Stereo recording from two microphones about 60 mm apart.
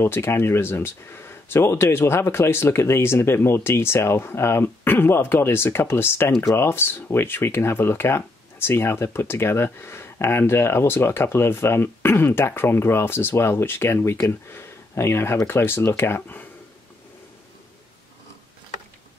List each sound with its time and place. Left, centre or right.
0.0 s speech: left